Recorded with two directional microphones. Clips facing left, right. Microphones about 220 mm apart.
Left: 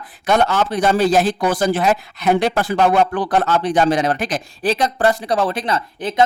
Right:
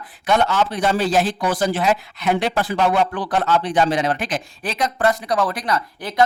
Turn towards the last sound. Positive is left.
turn(degrees=20)  # may be behind; listen again after turning